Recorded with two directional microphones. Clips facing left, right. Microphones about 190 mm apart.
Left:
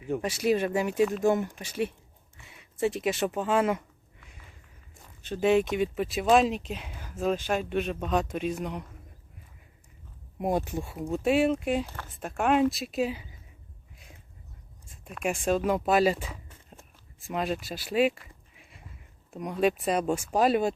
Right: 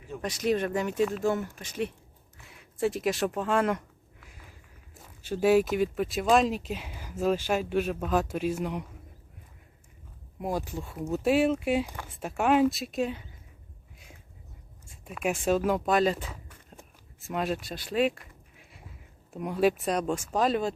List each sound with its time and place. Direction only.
0.2 s speech: 5° left (ahead or behind)
10.4 s speech: 20° left (ahead or behind)
11.1 s speech: centre (ahead or behind)
15.0 s speech: 5° right (ahead or behind)